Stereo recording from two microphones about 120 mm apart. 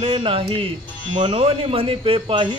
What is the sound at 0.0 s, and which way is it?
Speech, 50° right (ahead or behind).